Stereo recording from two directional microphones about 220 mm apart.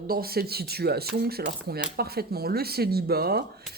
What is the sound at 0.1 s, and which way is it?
Speech, 45° right (ahead or behind).